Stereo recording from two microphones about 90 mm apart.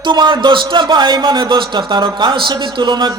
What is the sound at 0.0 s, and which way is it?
A man's voice, 60° right (ahead or behind).